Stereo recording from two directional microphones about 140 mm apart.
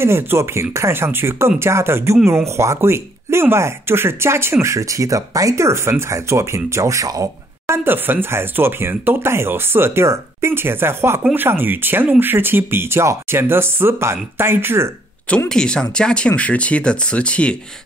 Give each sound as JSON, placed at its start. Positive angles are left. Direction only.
{"t": 0.0, "sound": "speech", "side_deg": -20}
{"t": 15.2, "sound": "speech", "side_deg": 5}